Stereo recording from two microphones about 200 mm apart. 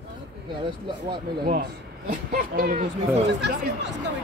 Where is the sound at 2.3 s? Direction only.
45° right (ahead or behind).